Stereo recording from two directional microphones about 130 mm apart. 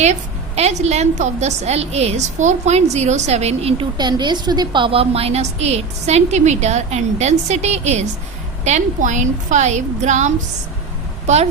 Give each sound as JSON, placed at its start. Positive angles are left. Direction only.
{"t": 0.0, "sound": "a woman's voice", "side_deg": -55}
{"t": 3.9, "sound": "a woman's voice", "side_deg": -35}